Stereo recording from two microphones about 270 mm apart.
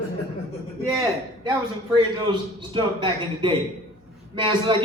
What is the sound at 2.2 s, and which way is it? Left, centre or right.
A man's voice, centre.